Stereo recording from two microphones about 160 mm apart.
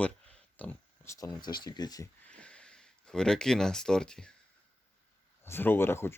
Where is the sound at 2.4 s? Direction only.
5° left (ahead or behind).